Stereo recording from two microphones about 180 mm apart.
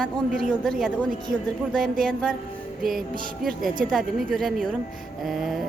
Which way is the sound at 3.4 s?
Centre (ahead or behind).